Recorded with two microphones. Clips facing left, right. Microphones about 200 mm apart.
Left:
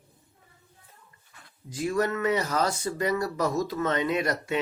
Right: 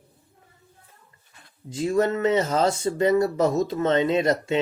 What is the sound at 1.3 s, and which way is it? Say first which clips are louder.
Speech: right 5 dB; 25° right (ahead or behind).